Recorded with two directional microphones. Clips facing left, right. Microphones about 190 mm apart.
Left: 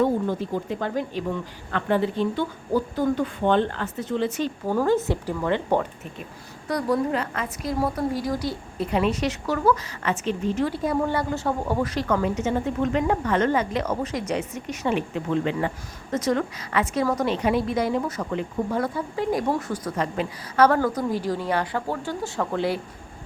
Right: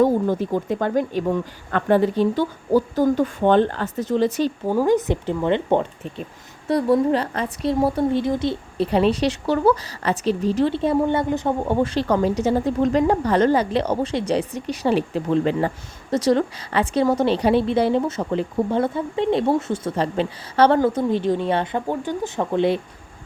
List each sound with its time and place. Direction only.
0.0 s a woman's voice: 45° right (ahead or behind)
4.7 s a woman's voice: 15° right (ahead or behind)